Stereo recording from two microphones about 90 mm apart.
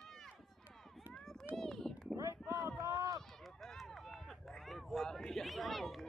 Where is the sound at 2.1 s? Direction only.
35° right (ahead or behind).